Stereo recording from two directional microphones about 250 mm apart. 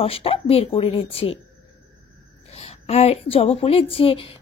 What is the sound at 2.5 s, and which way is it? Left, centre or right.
A woman's voice, left.